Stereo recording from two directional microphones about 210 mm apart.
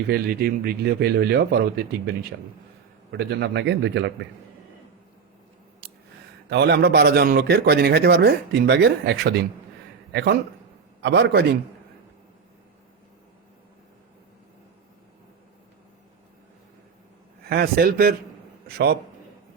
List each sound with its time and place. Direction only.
0.1 s a man's voice: 45° right (ahead or behind)
6.5 s a man's voice: 50° right (ahead or behind)
17.4 s a man's voice: 45° right (ahead or behind)